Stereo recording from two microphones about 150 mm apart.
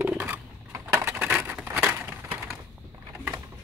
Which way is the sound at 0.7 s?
20° right (ahead or behind).